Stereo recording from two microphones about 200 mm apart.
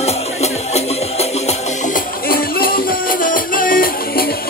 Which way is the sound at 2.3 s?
50° left (ahead or behind).